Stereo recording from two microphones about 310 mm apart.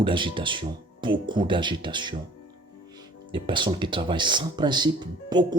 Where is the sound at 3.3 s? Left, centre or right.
Centre.